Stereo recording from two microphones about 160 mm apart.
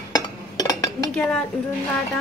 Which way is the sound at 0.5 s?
25° left (ahead or behind).